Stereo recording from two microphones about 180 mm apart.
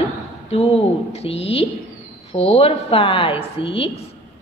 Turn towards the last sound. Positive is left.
turn(degrees=30)  # may be behind; listen again after turning